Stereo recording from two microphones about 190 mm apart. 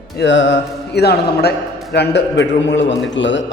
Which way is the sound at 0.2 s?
65° left (ahead or behind).